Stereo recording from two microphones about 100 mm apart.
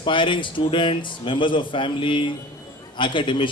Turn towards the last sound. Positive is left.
turn(degrees=55)  # may be behind; listen again after turning